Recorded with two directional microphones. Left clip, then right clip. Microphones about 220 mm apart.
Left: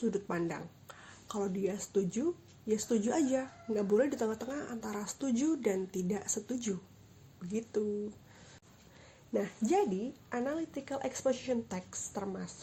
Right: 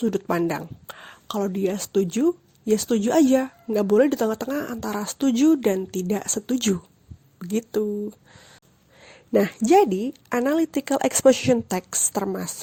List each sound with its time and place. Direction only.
0.0 s speech: 40° right (ahead or behind)
9.3 s speech: 45° right (ahead or behind)